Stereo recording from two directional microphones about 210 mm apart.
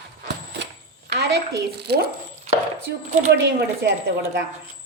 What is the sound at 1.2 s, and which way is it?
Speech, 50° right (ahead or behind).